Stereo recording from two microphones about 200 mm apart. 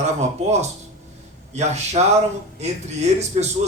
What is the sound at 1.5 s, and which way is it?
A man's voice, 35° right (ahead or behind).